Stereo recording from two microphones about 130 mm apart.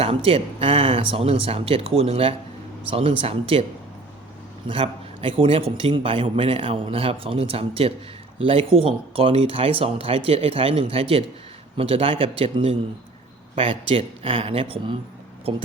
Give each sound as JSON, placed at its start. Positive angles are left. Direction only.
{"t": 0.0, "sound": "a man's voice", "side_deg": -50}
{"t": 4.7, "sound": "a man's voice", "side_deg": -45}